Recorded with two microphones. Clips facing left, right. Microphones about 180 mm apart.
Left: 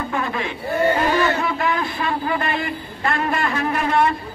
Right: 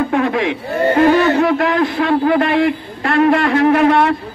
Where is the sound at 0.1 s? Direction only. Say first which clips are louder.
Right 9 dB; 80° right.